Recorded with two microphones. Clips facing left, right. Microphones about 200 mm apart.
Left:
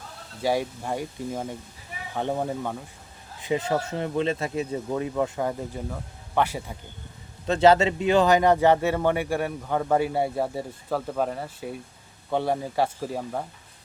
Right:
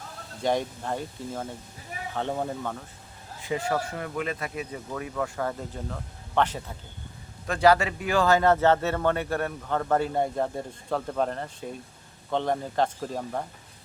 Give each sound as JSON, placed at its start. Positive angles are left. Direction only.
{"t": 0.4, "sound": "a man's voice", "side_deg": 10}
{"t": 7.4, "sound": "a man's voice", "side_deg": 25}